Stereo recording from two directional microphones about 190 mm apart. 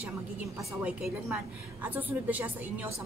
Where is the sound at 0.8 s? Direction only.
5° right (ahead or behind).